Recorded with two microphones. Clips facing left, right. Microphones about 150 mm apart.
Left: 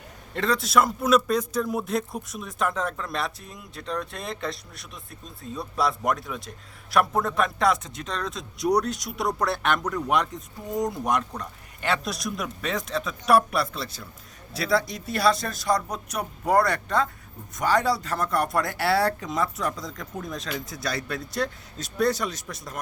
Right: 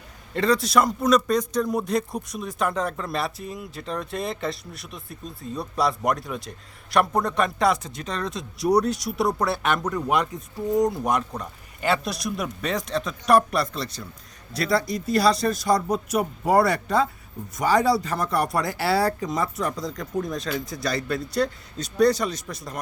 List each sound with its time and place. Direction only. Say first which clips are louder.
0.3 s a man's voice: right 2 dB; centre (ahead or behind)